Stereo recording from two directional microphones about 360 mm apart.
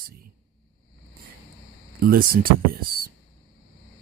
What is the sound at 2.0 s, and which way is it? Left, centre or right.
Speech, right.